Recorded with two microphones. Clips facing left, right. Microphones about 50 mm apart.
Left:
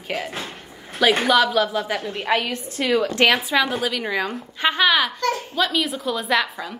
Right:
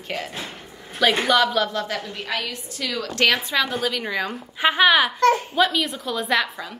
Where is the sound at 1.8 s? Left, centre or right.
Centre.